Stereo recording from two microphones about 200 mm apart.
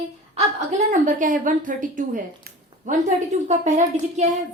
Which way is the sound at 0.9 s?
40° right (ahead or behind).